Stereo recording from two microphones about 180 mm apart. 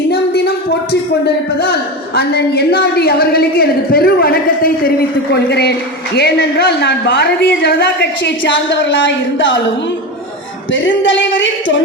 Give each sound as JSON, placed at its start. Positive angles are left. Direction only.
{"t": 0.1, "sound": "a sound", "side_deg": 60}
{"t": 1.2, "sound": "a man's voice", "side_deg": 65}
{"t": 10.7, "sound": "speech", "side_deg": 90}